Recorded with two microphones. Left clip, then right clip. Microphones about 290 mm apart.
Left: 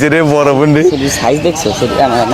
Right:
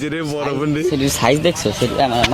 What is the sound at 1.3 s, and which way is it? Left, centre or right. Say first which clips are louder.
Speech: left 4 dB; right.